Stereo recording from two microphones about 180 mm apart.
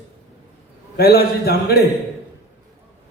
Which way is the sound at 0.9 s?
60° left (ahead or behind).